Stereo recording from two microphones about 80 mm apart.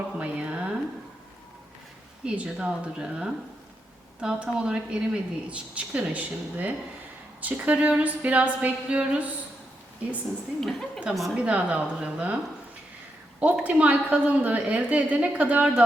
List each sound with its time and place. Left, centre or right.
0.2 s a sound: centre
2.2 s a woman's voice: centre
10.6 s a woman's voice: centre
11.3 s a woman's voice: centre
13.4 s a woman's voice: centre